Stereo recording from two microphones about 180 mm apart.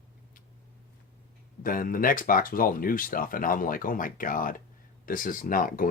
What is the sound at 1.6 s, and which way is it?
Speech, 50° left (ahead or behind).